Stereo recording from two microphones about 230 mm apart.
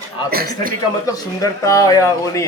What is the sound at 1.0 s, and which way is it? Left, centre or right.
A man's voice, centre.